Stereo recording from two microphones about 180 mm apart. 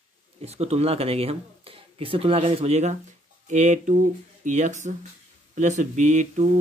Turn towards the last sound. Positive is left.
turn(degrees=-40)  # may be behind; listen again after turning